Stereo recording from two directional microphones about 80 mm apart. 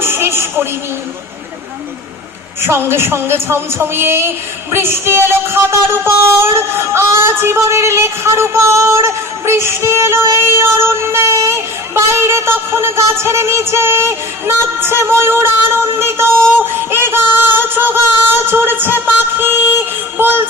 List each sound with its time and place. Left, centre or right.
0.0 s music: right
2.6 s child singing: right
16.6 s music: right